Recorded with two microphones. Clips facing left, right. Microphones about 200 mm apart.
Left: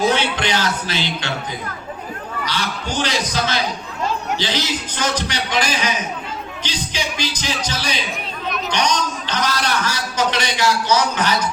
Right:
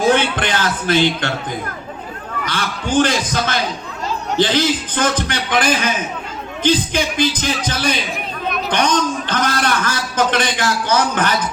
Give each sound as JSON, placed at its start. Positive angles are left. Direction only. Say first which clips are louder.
{"t": 0.1, "sound": "a man's voice", "louder": "right 3 dB", "side_deg": -50}
{"t": 2.5, "sound": "a man's voice", "louder": "right 6 dB", "side_deg": -50}